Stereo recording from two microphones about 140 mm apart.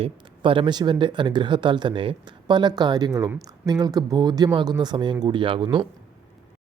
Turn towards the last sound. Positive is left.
turn(degrees=-35)  # may be behind; listen again after turning